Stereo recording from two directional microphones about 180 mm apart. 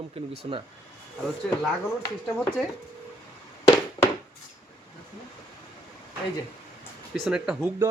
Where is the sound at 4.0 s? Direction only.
20° left (ahead or behind).